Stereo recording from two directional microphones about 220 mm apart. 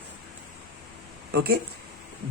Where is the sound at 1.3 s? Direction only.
45° right (ahead or behind).